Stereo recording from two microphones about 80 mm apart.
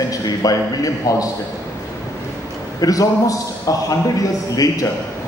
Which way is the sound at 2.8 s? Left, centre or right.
Left.